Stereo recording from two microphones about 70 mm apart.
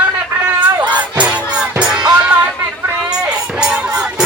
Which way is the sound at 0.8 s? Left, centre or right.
Right.